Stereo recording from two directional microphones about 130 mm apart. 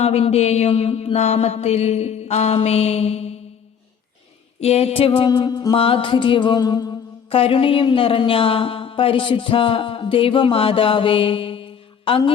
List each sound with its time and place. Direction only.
0.0 s mantra: 50° left (ahead or behind)
4.6 s speech: 55° left (ahead or behind); by 5.7 s 35° left (ahead or behind)
5.7 s music: 45° left (ahead or behind)
7.3 s speech: 45° left (ahead or behind)